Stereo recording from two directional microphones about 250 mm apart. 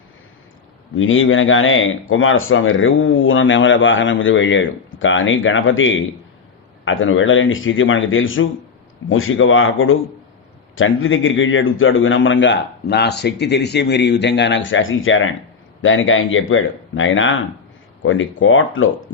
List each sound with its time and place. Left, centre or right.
0.9 s speech: left